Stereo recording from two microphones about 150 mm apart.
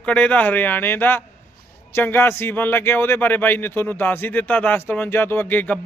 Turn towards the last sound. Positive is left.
turn(degrees=10)  # may be behind; listen again after turning